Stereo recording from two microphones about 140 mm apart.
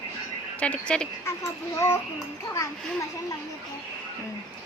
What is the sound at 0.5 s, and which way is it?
Speech, 10° left (ahead or behind).